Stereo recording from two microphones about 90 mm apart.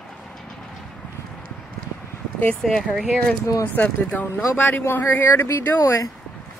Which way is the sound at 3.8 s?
20° left (ahead or behind).